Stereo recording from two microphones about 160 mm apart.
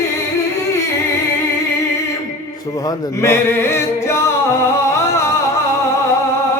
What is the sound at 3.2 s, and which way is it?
Singing, 15° left (ahead or behind).